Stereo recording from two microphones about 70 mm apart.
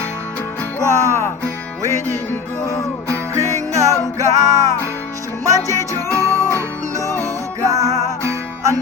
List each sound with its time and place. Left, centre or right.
0.8 s music: right
3.3 s music: right
7.6 s music: right